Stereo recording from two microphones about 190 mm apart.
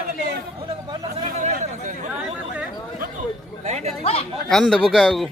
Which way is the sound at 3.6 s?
35° right (ahead or behind).